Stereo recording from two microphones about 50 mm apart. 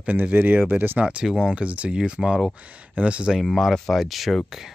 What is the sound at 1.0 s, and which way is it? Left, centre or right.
Speech, centre.